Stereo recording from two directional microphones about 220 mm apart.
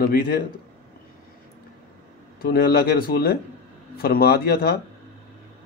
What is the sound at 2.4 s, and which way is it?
Speech, 45° left (ahead or behind).